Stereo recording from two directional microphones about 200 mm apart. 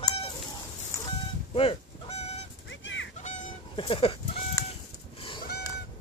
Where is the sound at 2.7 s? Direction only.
65° left (ahead or behind).